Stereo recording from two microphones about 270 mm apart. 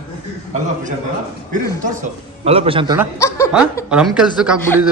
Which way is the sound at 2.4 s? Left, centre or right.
Right.